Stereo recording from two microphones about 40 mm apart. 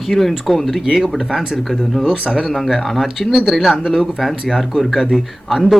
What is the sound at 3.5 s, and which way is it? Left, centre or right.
A man's voice, centre.